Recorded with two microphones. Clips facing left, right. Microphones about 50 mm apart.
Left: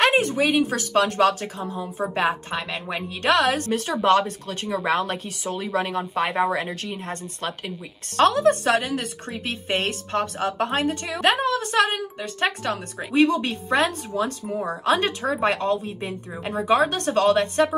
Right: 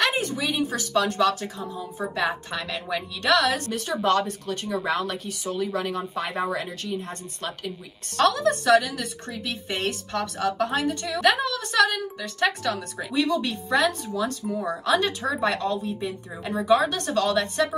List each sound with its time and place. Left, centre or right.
0.0 s speech: left